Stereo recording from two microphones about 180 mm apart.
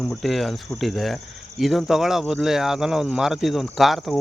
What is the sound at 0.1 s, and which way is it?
Speech, centre (ahead or behind).